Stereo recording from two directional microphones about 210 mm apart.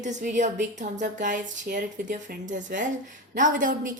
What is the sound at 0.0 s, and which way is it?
A woman's voice, 35° right (ahead or behind).